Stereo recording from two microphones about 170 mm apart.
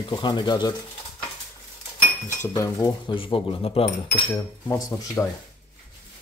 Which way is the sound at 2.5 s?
25° left (ahead or behind).